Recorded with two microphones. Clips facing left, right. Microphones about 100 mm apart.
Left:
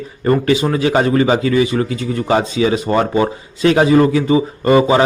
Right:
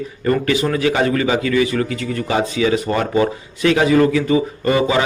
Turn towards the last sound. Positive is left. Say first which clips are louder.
# left 5 dB
turn(degrees=35)  # may be behind; listen again after turning